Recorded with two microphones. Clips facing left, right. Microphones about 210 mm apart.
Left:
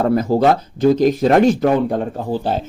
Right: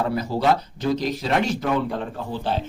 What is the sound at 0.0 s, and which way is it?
Speech, 50° left (ahead or behind).